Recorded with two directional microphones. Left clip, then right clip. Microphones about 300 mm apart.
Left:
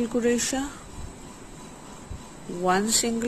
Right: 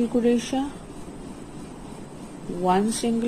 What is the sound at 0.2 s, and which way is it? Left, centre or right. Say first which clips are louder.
Speech: even; left.